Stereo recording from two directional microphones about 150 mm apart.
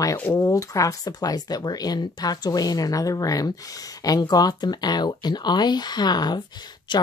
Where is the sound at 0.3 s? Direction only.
20° left (ahead or behind).